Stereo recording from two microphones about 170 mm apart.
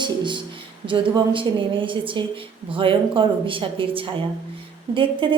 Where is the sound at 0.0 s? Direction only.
25° right (ahead or behind).